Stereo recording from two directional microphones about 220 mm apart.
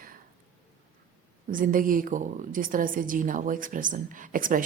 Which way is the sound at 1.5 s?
40° right (ahead or behind).